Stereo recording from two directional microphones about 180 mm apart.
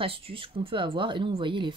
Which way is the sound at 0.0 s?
30° right (ahead or behind).